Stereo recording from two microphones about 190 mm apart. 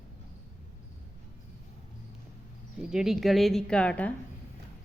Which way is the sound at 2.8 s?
5° right (ahead or behind).